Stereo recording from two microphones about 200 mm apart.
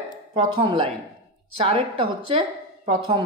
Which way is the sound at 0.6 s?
25° right (ahead or behind).